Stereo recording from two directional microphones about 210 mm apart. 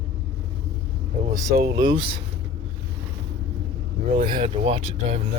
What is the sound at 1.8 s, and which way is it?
Speech, 20° right (ahead or behind).